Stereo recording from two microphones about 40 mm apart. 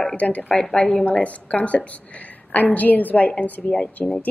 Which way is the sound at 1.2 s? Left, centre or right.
Left.